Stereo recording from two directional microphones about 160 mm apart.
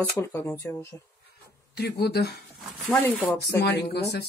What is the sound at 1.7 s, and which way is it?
Speech, 90° left.